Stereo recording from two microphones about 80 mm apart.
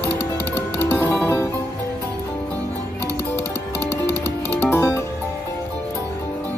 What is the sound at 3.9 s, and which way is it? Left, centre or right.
Music, left.